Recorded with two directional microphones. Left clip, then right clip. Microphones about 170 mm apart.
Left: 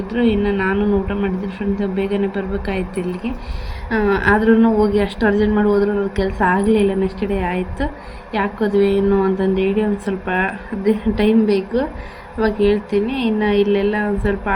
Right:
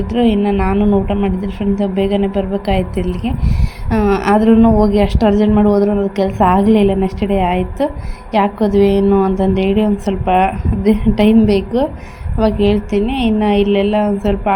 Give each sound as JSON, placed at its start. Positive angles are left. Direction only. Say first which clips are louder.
{"t": 0.1, "sound": "a woman's voice", "louder": "right 3 dB", "side_deg": -30}